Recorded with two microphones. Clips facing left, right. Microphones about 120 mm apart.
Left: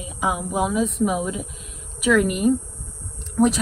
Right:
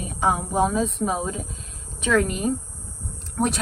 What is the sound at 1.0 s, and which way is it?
Speech, 30° right (ahead or behind).